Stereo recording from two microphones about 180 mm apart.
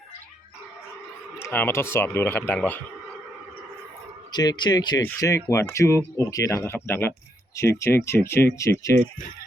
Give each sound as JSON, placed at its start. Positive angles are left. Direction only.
{"t": 1.4, "sound": "speech", "side_deg": 15}
{"t": 4.3, "sound": "speech", "side_deg": 25}